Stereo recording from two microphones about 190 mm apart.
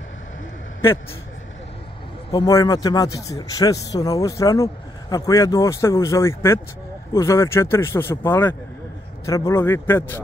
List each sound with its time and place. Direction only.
2.3 s speech: 20° left (ahead or behind)